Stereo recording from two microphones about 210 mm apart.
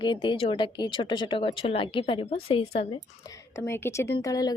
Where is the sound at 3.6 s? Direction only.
10° left (ahead or behind).